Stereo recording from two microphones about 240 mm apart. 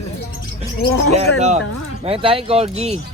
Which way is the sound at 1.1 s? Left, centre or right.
Right.